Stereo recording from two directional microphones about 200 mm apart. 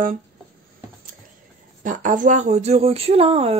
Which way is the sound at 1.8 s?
40° right (ahead or behind).